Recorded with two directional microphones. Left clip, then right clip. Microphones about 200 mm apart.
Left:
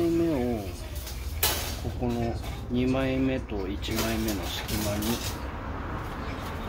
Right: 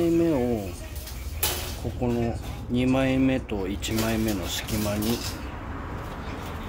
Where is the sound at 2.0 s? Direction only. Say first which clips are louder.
Right 3 dB; 50° right (ahead or behind).